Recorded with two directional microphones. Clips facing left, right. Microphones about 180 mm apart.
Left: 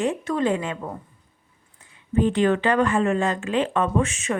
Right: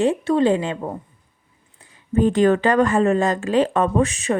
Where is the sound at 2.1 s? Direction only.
45° right (ahead or behind).